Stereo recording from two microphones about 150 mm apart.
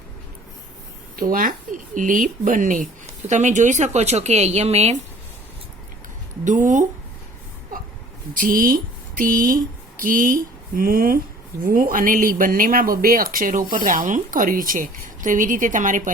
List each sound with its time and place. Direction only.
1.2 s speech: 65° right (ahead or behind); by 4.9 s 45° right (ahead or behind)
6.4 s speech: 60° right (ahead or behind)
8.4 s speech: 65° right (ahead or behind)